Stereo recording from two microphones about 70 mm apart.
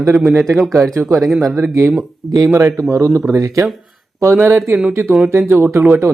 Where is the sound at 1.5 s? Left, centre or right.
Right.